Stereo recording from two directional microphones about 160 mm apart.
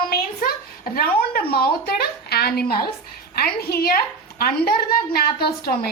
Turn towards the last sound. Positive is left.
turn(degrees=75)  # may be behind; listen again after turning